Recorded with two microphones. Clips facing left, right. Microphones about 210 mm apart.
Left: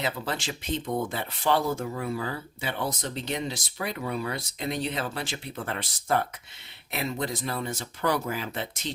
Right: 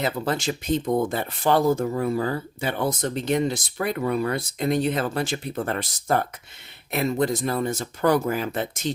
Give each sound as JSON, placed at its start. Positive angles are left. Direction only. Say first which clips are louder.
{"t": 0.0, "sound": "speech", "louder": "right 6 dB", "side_deg": -45}